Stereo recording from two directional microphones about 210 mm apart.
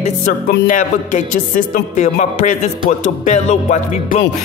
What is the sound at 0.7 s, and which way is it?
Speech, 40° left (ahead or behind).